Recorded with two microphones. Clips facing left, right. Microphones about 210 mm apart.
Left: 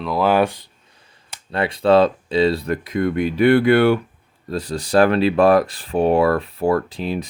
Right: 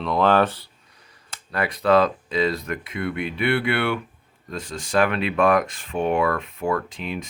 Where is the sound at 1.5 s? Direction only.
25° left (ahead or behind).